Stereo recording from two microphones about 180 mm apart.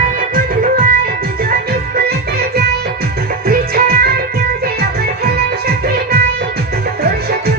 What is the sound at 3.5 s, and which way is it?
Music, 55° right (ahead or behind).